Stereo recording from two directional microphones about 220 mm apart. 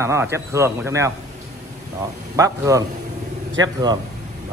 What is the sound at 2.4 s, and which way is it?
A man's voice, 15° right (ahead or behind).